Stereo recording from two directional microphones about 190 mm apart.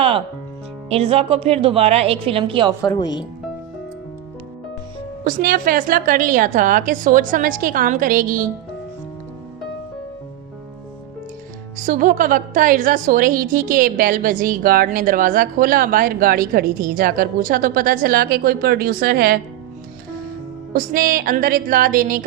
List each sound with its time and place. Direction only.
0.9 s a woman's voice: 30° right (ahead or behind)
2.8 s speech: 20° left (ahead or behind)
5.2 s a woman's voice: 45° right (ahead or behind)
11.8 s a woman's voice: 45° right (ahead or behind)
20.7 s a woman's voice: 50° right (ahead or behind)